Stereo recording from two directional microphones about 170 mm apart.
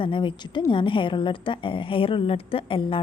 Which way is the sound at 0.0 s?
30° left (ahead or behind).